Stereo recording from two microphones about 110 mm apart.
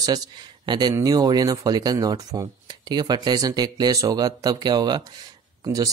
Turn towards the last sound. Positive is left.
turn(degrees=-35)  # may be behind; listen again after turning